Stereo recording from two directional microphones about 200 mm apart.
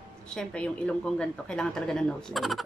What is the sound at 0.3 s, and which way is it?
A woman's voice, 5° left (ahead or behind).